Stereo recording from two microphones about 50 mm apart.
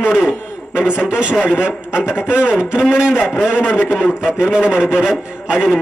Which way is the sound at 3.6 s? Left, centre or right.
Left.